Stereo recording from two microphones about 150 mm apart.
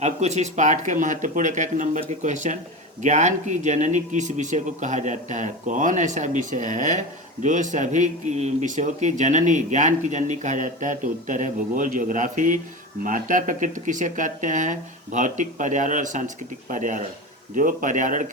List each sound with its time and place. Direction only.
0.0 s speech: 50° right (ahead or behind)